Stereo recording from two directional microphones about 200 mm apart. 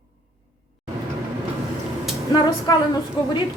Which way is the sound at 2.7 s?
20° left (ahead or behind).